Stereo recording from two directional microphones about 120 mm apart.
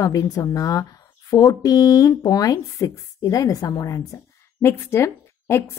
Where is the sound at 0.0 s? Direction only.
30° left (ahead or behind).